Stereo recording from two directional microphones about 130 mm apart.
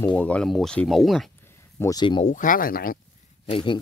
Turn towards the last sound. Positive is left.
turn(degrees=40)  # may be behind; listen again after turning